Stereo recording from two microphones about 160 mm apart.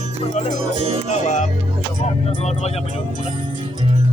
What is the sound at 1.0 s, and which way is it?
Music, 45° left (ahead or behind).